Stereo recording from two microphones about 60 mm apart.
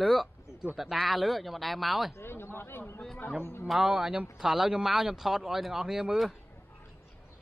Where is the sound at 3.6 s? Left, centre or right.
Centre.